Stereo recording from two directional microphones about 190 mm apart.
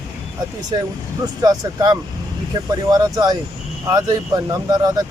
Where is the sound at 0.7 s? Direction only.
20° right (ahead or behind).